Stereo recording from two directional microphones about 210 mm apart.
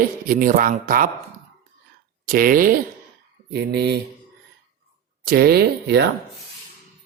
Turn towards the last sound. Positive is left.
turn(degrees=-50)  # may be behind; listen again after turning